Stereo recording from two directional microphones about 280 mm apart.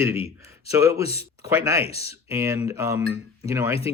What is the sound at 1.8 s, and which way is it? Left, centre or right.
Speech, left.